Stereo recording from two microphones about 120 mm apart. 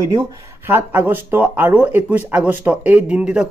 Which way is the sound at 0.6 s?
15° right (ahead or behind).